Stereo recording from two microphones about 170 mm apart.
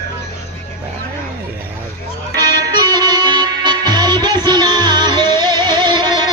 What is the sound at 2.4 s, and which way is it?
Music, 20° right (ahead or behind).